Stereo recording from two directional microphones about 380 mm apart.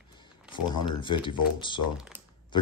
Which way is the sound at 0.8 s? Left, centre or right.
Centre.